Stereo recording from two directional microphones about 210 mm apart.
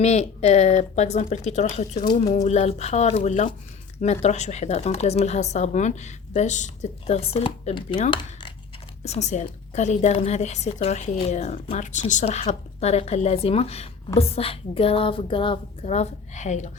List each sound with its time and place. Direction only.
0.0 s a woman's voice: 30° left (ahead or behind)
8.1 s a sound: 20° left (ahead or behind)
9.0 s a woman's voice: 30° left (ahead or behind)